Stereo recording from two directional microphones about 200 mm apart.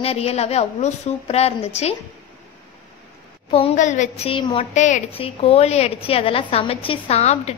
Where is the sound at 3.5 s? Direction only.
30° left (ahead or behind).